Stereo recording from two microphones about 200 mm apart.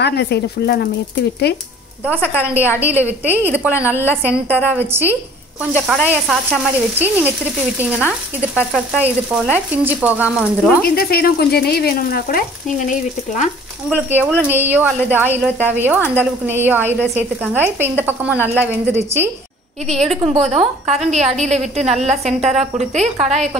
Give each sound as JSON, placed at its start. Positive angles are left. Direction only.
{"t": 0.0, "sound": "speech", "side_deg": 55}
{"t": 2.2, "sound": "speech", "side_deg": -10}
{"t": 5.9, "sound": "frying", "side_deg": 0}
{"t": 7.8, "sound": "speech", "side_deg": -10}
{"t": 10.8, "sound": "speech", "side_deg": 50}
{"t": 13.8, "sound": "speech", "side_deg": -10}
{"t": 19.9, "sound": "a woman's voice", "side_deg": -30}